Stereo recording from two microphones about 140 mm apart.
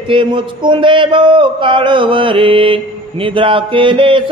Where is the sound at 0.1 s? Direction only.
35° right (ahead or behind).